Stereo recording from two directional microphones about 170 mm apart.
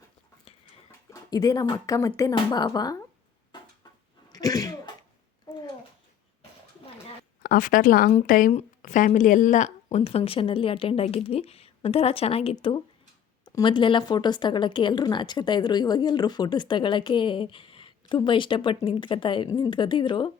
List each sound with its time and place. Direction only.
0.9 s speech: 20° left (ahead or behind)
4.3 s sneeze: 20° left (ahead or behind)
7.4 s a woman's voice: 55° left (ahead or behind); by 12.5 s 35° left (ahead or behind)
13.6 s a woman's voice: 30° left (ahead or behind)